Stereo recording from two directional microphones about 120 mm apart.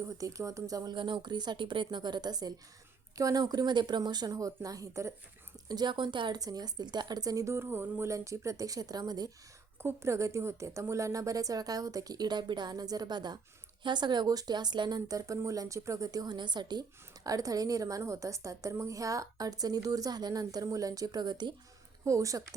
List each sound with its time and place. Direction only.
0.0 s a woman's voice: 25° right (ahead or behind)